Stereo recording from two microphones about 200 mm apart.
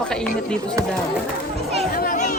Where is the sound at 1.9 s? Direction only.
45° left (ahead or behind).